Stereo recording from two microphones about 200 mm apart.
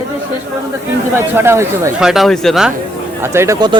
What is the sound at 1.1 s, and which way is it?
Speech, 10° right (ahead or behind).